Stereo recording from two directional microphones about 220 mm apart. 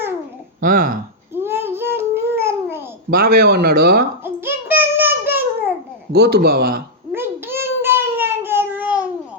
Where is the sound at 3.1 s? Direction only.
45° right (ahead or behind).